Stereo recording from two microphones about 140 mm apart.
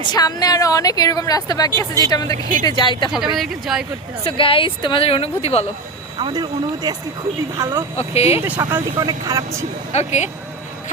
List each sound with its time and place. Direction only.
0.0 s a woman's voice: 30° left (ahead or behind)
3.3 s speech: centre (ahead or behind)
4.2 s speech: 40° left (ahead or behind)
6.1 s speech: 35° right (ahead or behind)
7.6 s speech: 20° right (ahead or behind)
7.9 s speech: 50° left (ahead or behind)
8.4 s speech: 15° right (ahead or behind)
9.0 s speech: 25° right (ahead or behind)
9.9 s speech: 55° left (ahead or behind)